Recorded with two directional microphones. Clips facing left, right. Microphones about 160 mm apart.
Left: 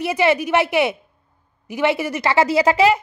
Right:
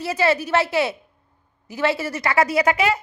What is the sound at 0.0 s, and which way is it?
A woman's voice, 20° left (ahead or behind).